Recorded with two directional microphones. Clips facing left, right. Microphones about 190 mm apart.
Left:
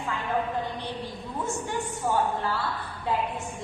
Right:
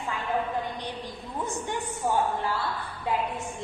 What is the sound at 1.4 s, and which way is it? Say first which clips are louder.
Speech: even; 15° right (ahead or behind).